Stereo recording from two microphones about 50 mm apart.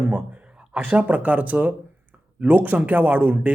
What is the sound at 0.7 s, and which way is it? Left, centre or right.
A man's voice, right.